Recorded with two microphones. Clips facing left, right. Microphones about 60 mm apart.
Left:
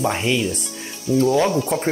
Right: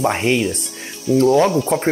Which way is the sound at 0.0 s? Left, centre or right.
Right.